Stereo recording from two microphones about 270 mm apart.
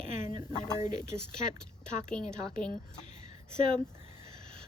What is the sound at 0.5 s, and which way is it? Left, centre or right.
Speech, centre.